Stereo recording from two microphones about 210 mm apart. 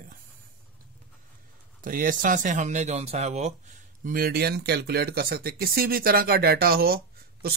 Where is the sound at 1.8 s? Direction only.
40° right (ahead or behind).